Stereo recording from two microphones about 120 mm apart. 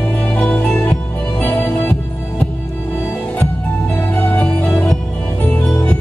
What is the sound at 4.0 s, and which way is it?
Music, 15° left (ahead or behind).